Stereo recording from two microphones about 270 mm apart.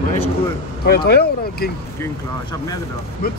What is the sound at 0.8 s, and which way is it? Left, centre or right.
Speech, left.